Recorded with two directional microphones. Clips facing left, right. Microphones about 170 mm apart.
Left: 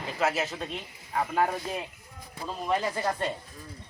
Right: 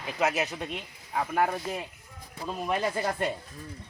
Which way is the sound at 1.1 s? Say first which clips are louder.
Even; 5° right (ahead or behind).